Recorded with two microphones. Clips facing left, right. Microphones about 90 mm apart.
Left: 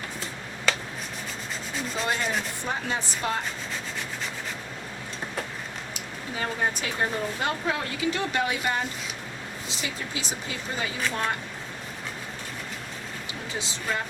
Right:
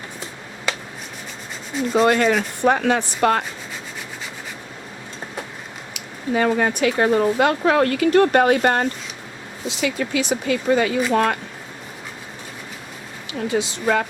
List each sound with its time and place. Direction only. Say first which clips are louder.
1.9 s speech: right 12 dB; 60° right (ahead or behind)
5.9 s speech: right 11 dB; 75° right (ahead or behind)
13.5 s speech: right 11 dB; 65° right (ahead or behind)